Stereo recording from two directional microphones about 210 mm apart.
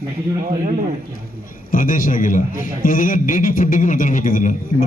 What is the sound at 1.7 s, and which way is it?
A man's voice, 40° left (ahead or behind).